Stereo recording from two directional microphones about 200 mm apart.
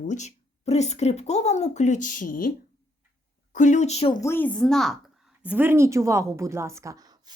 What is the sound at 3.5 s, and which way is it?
Speech, 40° left (ahead or behind).